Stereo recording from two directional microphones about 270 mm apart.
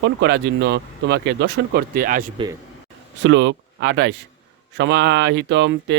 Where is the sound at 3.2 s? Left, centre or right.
Right.